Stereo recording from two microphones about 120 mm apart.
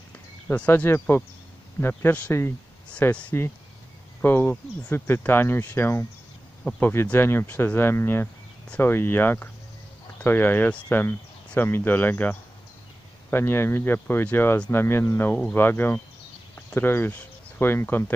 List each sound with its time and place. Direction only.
0.5 s speech: 15° left (ahead or behind)